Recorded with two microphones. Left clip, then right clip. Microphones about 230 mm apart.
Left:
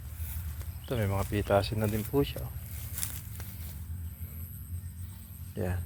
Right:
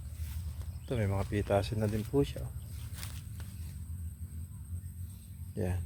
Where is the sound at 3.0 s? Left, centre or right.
Left.